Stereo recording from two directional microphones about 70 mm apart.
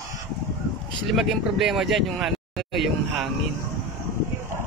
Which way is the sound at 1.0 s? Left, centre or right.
Centre.